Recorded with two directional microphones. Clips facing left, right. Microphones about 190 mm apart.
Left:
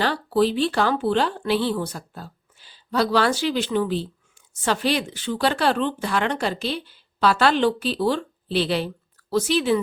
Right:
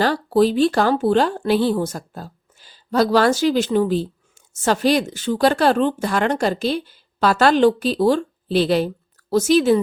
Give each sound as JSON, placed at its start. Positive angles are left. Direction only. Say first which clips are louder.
{"t": 0.0, "sound": "speech", "louder": "right 4 dB", "side_deg": -40}